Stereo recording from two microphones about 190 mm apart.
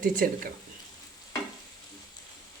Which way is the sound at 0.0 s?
45° right (ahead or behind).